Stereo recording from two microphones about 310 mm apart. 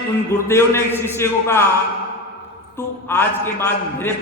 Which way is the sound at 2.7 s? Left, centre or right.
Centre.